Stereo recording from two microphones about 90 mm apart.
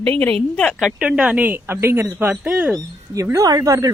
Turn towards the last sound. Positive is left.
turn(degrees=-40)  # may be behind; listen again after turning